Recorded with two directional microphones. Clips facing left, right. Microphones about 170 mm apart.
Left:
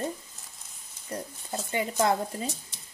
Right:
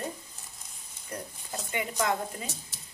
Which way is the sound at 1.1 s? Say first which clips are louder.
Left 4 dB; 30° left (ahead or behind).